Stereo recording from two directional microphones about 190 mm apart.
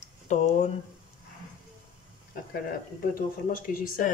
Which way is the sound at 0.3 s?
40° left (ahead or behind).